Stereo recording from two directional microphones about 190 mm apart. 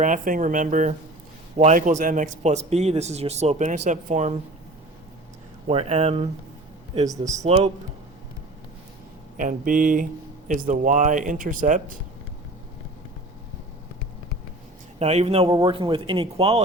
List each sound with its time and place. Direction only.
0.0 s speech: 45° right (ahead or behind)
5.6 s speech: 35° right (ahead or behind)
7.0 s speech: 20° right (ahead or behind)
7.4 s speech: 35° right (ahead or behind)
9.4 s speech: 45° right (ahead or behind)
14.9 s speech: 35° right (ahead or behind)